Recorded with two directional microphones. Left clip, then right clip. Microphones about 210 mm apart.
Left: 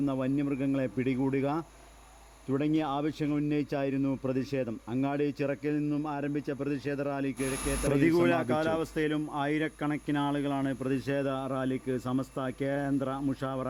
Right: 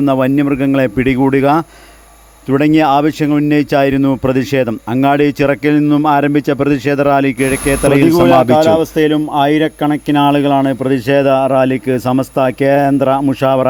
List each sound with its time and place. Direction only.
0.0 s speech: 30° right (ahead or behind)
8.0 s speech: 20° right (ahead or behind)